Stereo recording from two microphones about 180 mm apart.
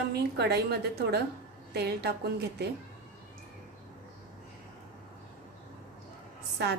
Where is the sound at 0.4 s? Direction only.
65° right (ahead or behind).